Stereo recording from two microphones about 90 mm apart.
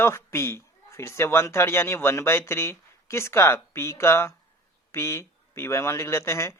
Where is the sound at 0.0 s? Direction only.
30° left (ahead or behind).